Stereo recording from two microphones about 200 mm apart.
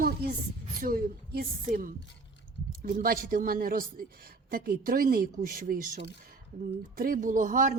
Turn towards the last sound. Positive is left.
turn(degrees=-40)  # may be behind; listen again after turning